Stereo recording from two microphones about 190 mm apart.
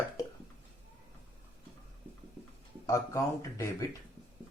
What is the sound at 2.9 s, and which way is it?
Speech, 15° left (ahead or behind).